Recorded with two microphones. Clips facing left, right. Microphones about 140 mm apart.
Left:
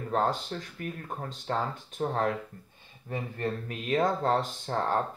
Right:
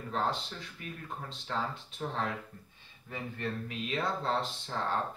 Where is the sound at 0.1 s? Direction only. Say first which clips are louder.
Left 5 dB; 50° left (ahead or behind).